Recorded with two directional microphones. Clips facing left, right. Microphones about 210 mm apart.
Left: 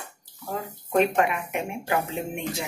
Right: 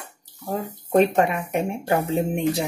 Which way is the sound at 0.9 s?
35° right (ahead or behind).